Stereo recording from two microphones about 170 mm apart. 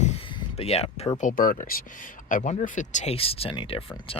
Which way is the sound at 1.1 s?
55° left (ahead or behind).